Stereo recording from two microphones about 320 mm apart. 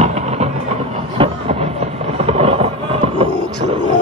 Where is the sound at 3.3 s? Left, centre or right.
Left.